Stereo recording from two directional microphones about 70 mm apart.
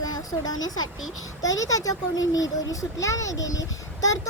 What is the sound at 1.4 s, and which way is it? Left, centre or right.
A child's voice, left.